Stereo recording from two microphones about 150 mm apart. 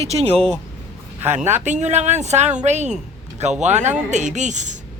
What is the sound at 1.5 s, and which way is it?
Speech, 50° right (ahead or behind).